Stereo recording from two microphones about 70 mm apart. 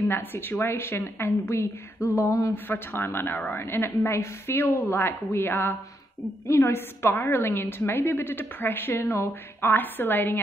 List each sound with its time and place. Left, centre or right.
0.1 s a woman's voice: left
2.5 s a woman's voice: left